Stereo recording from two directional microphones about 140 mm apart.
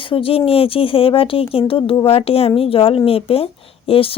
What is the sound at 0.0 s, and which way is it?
Speech, 40° left (ahead or behind).